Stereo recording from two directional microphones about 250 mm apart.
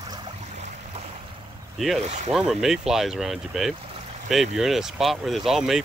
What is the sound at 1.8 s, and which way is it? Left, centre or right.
Speech, centre.